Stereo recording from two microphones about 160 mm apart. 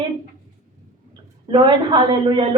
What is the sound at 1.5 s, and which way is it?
Speech, 30° right (ahead or behind).